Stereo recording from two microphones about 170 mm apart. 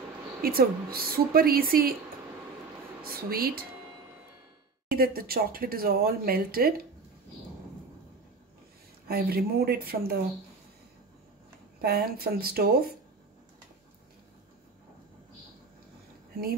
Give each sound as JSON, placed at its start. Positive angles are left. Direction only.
{"t": 0.4, "sound": "speech", "side_deg": -60}
{"t": 3.0, "sound": "speech", "side_deg": -60}
{"t": 4.9, "sound": "speech", "side_deg": -60}
{"t": 9.0, "sound": "a woman's voice", "side_deg": -65}
{"t": 11.8, "sound": "speech", "side_deg": -65}